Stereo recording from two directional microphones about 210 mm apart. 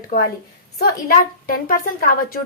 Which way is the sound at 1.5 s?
40° left (ahead or behind).